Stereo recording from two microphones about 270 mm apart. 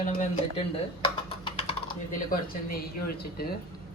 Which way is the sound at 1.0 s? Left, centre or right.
Centre.